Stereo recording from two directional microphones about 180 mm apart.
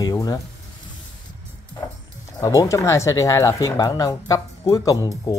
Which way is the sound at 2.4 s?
20° left (ahead or behind).